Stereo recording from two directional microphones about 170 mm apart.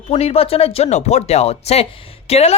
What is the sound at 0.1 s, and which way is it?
Speech, 35° left (ahead or behind).